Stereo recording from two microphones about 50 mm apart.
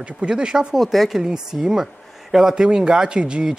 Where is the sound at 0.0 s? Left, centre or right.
Right.